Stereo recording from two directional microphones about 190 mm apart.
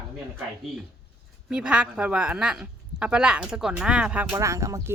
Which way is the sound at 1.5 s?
5° right (ahead or behind).